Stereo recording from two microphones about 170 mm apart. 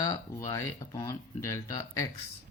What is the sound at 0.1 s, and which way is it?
Speech, 15° left (ahead or behind).